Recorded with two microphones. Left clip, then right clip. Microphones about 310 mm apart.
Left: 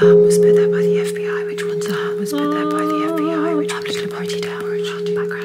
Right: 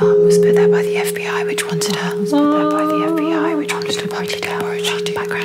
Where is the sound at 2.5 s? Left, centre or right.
Centre.